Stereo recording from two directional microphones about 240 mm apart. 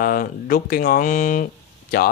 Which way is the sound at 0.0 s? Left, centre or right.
Left.